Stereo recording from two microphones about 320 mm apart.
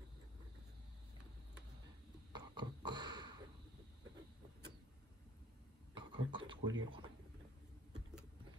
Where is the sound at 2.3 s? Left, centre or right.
Centre.